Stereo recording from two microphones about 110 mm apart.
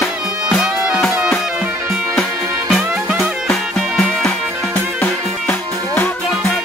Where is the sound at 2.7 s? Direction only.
5° right (ahead or behind).